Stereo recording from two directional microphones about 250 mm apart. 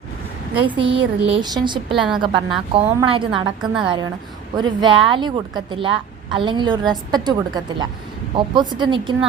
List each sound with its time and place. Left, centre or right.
0.6 s a woman's voice: centre